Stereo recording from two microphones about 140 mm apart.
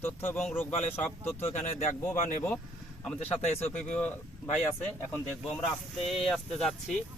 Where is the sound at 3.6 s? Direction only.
10° left (ahead or behind).